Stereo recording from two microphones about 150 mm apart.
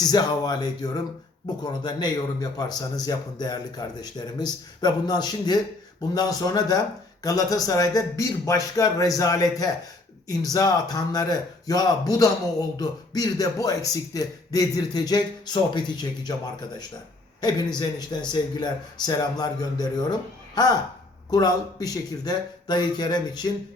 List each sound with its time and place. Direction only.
0.0 s a man's voice: 25° left (ahead or behind)
21.2 s a man's voice: 25° left (ahead or behind)